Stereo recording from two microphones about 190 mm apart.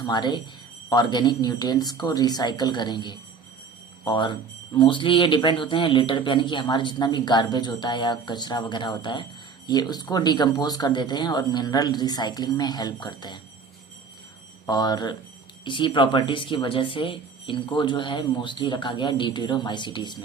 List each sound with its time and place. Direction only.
0.0 s speech: 20° left (ahead or behind)
14.7 s speech: 20° left (ahead or behind)